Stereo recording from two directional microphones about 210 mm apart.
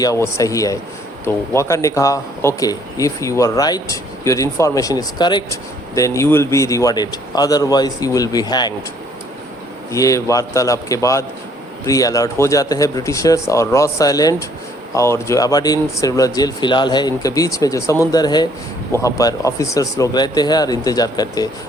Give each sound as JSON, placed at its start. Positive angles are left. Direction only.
{"t": 0.0, "sound": "speech", "side_deg": 15}
{"t": 9.9, "sound": "speech", "side_deg": 15}